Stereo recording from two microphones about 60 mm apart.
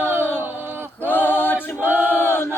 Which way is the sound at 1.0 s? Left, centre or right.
Left.